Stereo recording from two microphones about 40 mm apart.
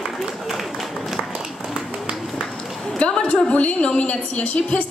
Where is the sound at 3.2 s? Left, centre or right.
Left.